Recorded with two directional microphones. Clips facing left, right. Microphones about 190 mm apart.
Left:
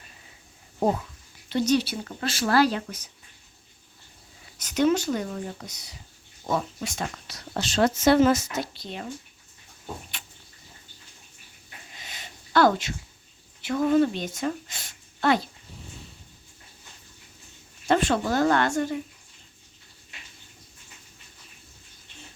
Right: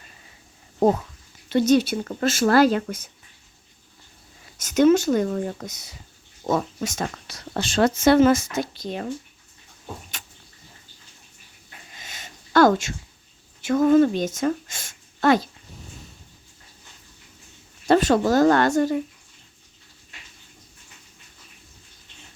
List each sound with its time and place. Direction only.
1.5 s speech: 50° right (ahead or behind)
4.5 s speech: 45° right (ahead or behind)
12.0 s a sound: 45° right (ahead or behind)
13.6 s a woman's voice: 45° right (ahead or behind)
17.8 s speech: 40° right (ahead or behind)